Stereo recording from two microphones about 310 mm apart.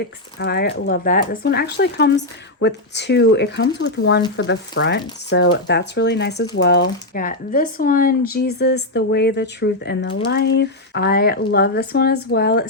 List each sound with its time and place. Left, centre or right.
0.3 s speech: left